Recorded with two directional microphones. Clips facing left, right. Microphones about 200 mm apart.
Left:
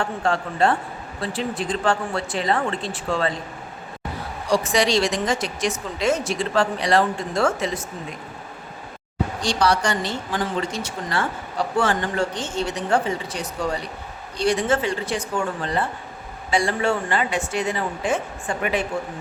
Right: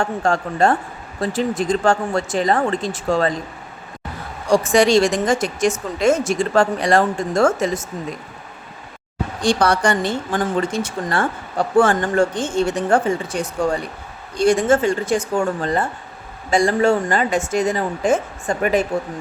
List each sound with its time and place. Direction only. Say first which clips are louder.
0.0 s speech: right 4 dB; 45° right (ahead or behind)
4.4 s speech: right 6 dB; 50° right (ahead or behind)
9.4 s speech: right 5 dB; 55° right (ahead or behind)